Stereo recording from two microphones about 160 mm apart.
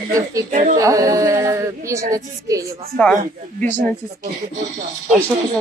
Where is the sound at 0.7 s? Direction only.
20° right (ahead or behind).